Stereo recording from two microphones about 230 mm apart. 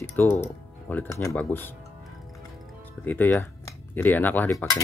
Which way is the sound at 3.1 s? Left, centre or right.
Centre.